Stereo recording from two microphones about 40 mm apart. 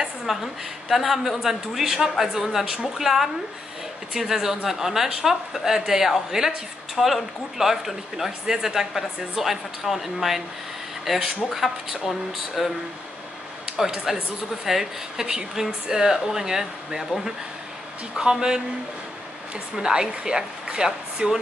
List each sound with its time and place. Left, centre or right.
0.3 s a woman's voice: centre
13.7 s speech: centre
19.7 s speech: centre